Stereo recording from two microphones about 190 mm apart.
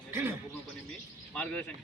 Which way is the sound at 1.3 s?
5° left (ahead or behind).